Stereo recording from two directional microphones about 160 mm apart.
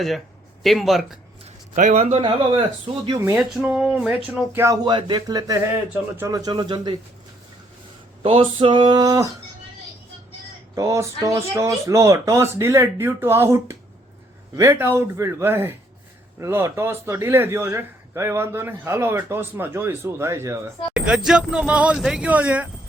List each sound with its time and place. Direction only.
0.6 s speech: centre (ahead or behind)
1.7 s speech: 45° right (ahead or behind); by 3.2 s 30° right (ahead or behind)
3.3 s speech: 5° right (ahead or behind)
4.5 s speech: 20° right (ahead or behind)
8.2 s speech: 35° right (ahead or behind)
10.8 s a man's voice: 20° right (ahead or behind)
20.9 s a man's voice: 5° right (ahead or behind)